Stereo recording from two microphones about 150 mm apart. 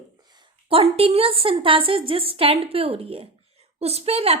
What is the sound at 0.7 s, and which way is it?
A woman's voice, 40° right (ahead or behind).